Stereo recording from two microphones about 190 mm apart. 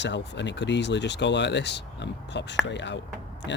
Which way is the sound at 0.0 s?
70° left (ahead or behind).